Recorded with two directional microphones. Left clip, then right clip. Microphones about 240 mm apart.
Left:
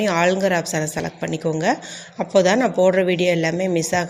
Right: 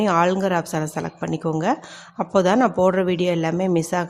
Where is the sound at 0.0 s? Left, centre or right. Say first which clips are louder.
Left 1 dB; centre.